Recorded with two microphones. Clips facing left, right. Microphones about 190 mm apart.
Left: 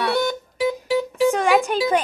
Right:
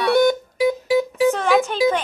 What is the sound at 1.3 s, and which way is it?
Music, 10° left (ahead or behind).